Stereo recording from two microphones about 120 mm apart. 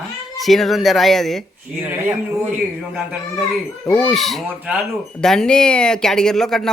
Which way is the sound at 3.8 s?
20° left (ahead or behind).